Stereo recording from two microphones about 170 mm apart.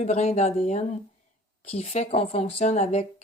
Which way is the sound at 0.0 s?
40° left (ahead or behind).